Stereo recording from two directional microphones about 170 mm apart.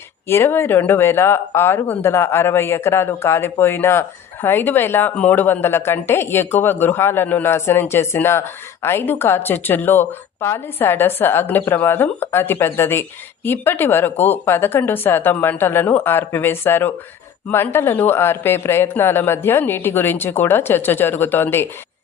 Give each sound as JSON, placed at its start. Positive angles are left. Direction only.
{"t": 0.3, "sound": "speech", "side_deg": 15}